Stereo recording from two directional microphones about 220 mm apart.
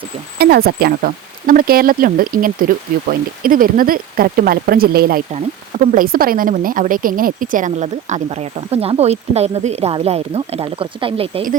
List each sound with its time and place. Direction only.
0.3 s a woman's voice: 45° right (ahead or behind); by 11.4 s 25° right (ahead or behind)